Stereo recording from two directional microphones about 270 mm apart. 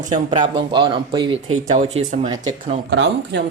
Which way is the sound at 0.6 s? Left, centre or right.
Centre.